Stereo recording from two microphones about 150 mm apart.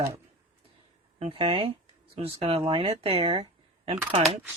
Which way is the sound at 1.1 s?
35° right (ahead or behind).